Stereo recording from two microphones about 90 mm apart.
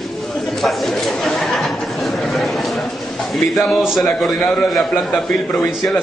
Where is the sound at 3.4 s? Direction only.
Centre (ahead or behind).